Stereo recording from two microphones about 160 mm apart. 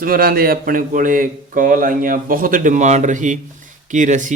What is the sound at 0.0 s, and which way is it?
A man's voice, 70° right (ahead or behind).